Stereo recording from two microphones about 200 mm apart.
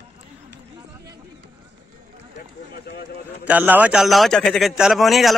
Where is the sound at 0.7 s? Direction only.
20° right (ahead or behind).